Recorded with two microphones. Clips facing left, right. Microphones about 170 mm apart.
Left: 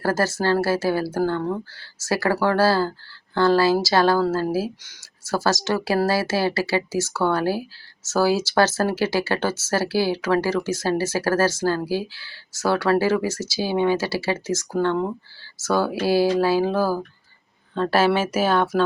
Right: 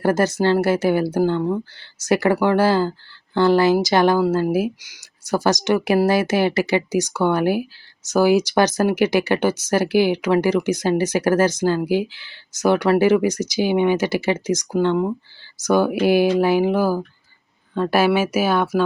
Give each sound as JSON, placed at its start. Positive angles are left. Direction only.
{"t": 0.0, "sound": "speech", "side_deg": -20}